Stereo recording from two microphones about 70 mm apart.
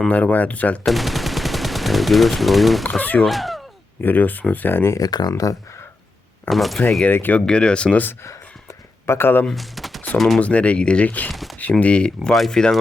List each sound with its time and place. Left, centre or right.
0.1 s speech: left
0.9 s speech: centre
3.0 s speech: left
3.2 s speech: centre
4.0 s speech: left
4.9 s speech: left
6.5 s speech: centre
7.1 s speech: left
7.3 s speech: centre
9.0 s speech: left
9.5 s speech: centre
10.4 s speech: centre
11.3 s speech: centre
11.7 s speech: centre